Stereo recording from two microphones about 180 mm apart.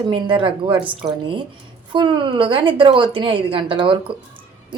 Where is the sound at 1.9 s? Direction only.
30° right (ahead or behind).